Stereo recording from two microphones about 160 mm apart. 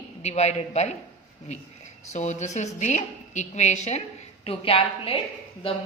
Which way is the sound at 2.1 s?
45° left (ahead or behind).